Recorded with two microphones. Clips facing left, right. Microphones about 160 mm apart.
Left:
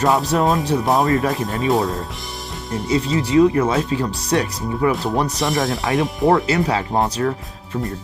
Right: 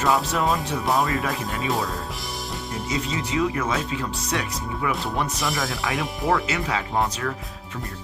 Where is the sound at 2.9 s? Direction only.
35° left (ahead or behind).